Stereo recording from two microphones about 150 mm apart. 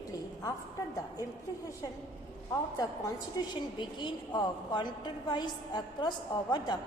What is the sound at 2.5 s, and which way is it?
A woman's voice, 20° left (ahead or behind).